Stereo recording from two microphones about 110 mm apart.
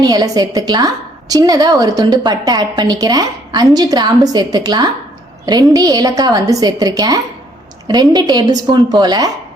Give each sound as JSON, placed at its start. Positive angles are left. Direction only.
{"t": 0.0, "sound": "a woman's voice", "side_deg": -35}